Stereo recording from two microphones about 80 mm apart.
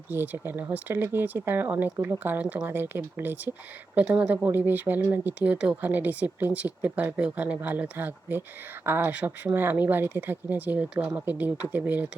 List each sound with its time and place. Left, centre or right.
0.1 s speech: right
2.4 s speech: centre
2.6 s speech: right
4.0 s speech: centre
4.4 s speech: right